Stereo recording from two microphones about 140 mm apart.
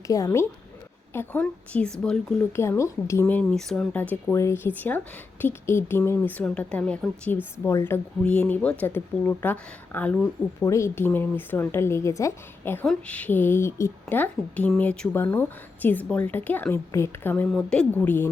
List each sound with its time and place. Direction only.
0.1 s a woman's voice: 20° left (ahead or behind); by 4.0 s 5° left (ahead or behind)
4.1 s a woman's voice: 20° left (ahead or behind)
10.7 s a woman's voice: 20° left (ahead or behind)